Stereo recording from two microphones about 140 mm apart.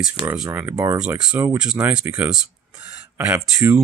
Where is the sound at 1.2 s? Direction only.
5° right (ahead or behind).